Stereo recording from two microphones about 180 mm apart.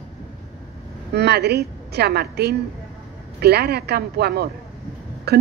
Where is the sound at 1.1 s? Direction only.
65° right (ahead or behind).